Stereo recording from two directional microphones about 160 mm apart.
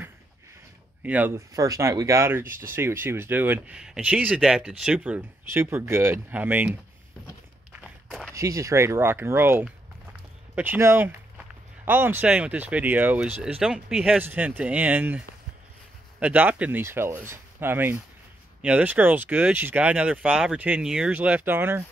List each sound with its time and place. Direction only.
1.0 s speech: 10° right (ahead or behind)
7.7 s walk: centre (ahead or behind)
8.4 s speech: 20° right (ahead or behind)